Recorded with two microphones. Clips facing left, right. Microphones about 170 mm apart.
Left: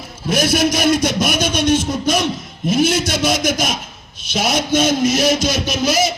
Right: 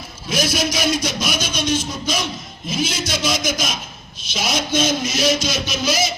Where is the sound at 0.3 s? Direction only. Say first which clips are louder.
Left 5 dB; 60° left (ahead or behind).